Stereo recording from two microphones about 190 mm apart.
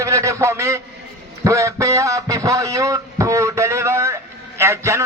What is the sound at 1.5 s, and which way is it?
A man's voice, 15° right (ahead or behind).